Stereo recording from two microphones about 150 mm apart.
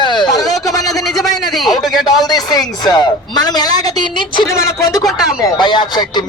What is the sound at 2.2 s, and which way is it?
Speech, 25° left (ahead or behind).